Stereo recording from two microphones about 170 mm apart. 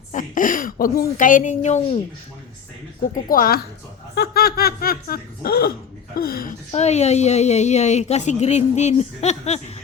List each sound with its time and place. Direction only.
0.1 s a woman's voice: 50° left (ahead or behind)
3.2 s snicker: 55° left (ahead or behind)
4.1 s snicker: 65° left (ahead or behind)
6.7 s a woman's voice: 40° left (ahead or behind)